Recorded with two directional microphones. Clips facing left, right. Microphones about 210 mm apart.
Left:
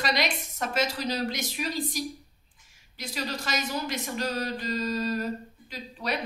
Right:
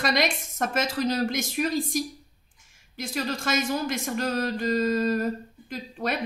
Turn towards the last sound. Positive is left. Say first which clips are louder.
# right 3 dB
turn(degrees=-50)  # may be behind; listen again after turning